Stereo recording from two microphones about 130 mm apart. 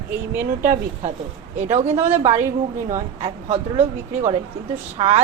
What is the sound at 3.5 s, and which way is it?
A woman's voice, 55° right (ahead or behind).